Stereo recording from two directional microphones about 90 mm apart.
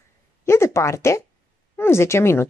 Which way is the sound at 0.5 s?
30° left (ahead or behind).